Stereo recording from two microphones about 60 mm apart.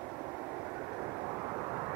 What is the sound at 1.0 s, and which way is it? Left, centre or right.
Vehicle, right.